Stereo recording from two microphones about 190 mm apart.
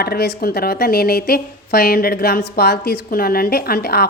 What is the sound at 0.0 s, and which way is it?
Speech, 55° left (ahead or behind).